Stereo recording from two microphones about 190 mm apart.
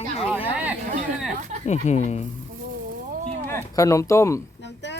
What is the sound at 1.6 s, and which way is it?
Speech, 35° left (ahead or behind).